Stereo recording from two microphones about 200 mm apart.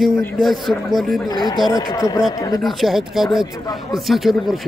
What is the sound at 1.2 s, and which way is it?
Speech, 20° left (ahead or behind).